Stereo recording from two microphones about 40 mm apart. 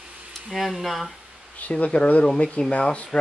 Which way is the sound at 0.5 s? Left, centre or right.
Centre.